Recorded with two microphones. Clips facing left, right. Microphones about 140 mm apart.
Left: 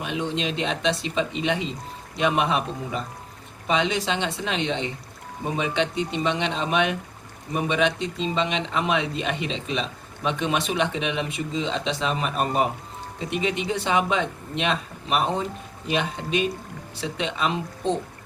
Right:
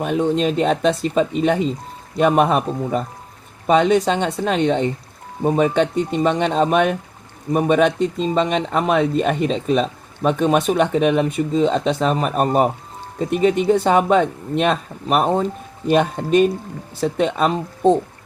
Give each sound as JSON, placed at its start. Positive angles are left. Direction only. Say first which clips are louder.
{"t": 0.0, "sound": "speech", "louder": "right 9 dB", "side_deg": -45}